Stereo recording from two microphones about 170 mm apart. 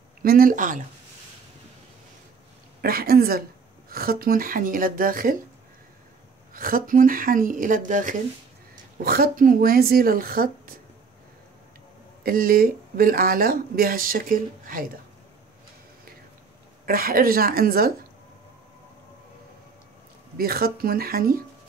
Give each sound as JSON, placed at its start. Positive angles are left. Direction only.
{"t": 0.2, "sound": "speech", "side_deg": -60}
{"t": 2.8, "sound": "speech", "side_deg": -60}
{"t": 6.5, "sound": "speech", "side_deg": -55}
{"t": 9.0, "sound": "speech", "side_deg": -60}
{"t": 12.2, "sound": "speech", "side_deg": -60}
{"t": 16.8, "sound": "speech", "side_deg": -55}
{"t": 20.3, "sound": "speech", "side_deg": -65}